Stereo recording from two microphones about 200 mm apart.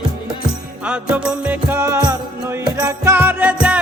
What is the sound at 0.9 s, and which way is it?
Music, 5° right (ahead or behind).